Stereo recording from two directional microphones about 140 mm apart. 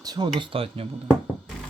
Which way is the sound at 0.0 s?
30° right (ahead or behind).